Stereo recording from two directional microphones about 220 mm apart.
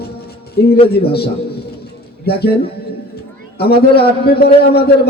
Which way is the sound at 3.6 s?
45° left (ahead or behind).